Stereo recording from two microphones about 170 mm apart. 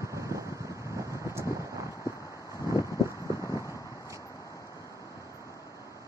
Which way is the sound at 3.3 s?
20° left (ahead or behind).